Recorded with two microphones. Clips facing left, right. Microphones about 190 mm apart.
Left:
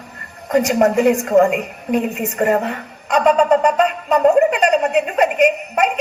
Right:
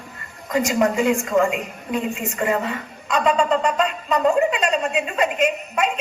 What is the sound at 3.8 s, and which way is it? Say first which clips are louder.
A woman's voice: left 5 dB; 60° left (ahead or behind).